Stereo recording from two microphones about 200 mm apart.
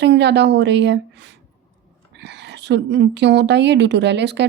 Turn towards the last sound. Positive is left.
turn(degrees=-60)  # may be behind; listen again after turning